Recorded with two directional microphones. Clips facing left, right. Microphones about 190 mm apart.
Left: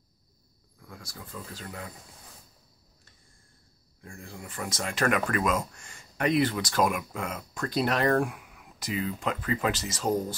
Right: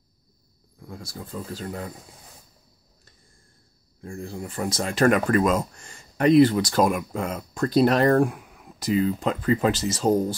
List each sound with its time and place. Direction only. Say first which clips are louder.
0.7 s speech: right 7 dB; 25° right (ahead or behind)
4.0 s speech: right 10 dB; 35° right (ahead or behind)